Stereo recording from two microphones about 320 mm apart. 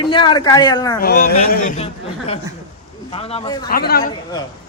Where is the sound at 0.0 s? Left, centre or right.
Centre.